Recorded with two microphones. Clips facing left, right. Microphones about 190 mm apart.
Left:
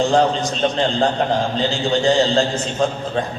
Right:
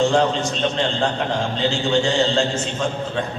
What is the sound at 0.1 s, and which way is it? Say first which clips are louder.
A man's voice: left 2 dB; 35° left (ahead or behind).